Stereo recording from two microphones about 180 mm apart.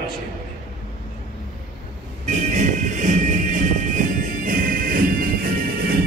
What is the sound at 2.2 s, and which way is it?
Music, 40° right (ahead or behind).